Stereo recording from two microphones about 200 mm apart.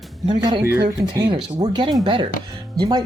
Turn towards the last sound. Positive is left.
turn(degrees=-20)  # may be behind; listen again after turning